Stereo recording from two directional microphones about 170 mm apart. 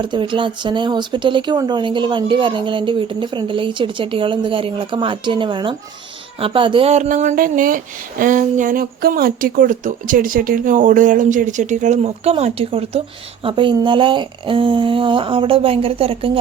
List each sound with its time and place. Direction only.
0.0 s speech: 30° right (ahead or behind)